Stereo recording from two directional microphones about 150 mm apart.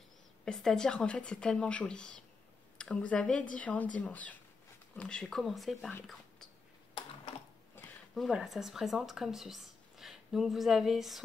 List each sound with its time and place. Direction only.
0.5 s speech: 5° left (ahead or behind)
7.8 s a sound: 15° left (ahead or behind)
8.1 s speech: centre (ahead or behind)